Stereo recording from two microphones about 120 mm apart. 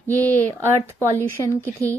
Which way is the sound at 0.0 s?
15° left (ahead or behind).